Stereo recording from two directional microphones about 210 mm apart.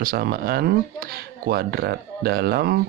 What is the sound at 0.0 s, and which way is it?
Speech, 45° right (ahead or behind).